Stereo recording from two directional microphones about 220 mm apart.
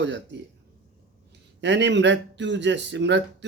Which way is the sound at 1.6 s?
55° right (ahead or behind).